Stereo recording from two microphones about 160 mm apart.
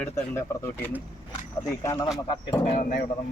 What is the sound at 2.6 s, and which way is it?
Speech, 45° left (ahead or behind).